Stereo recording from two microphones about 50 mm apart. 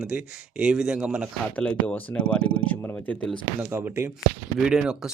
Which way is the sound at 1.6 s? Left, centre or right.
Left.